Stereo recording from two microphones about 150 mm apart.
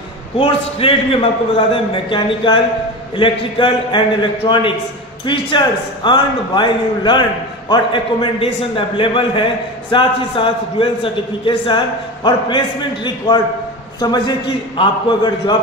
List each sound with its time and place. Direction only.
0.4 s a man's voice: 40° left (ahead or behind)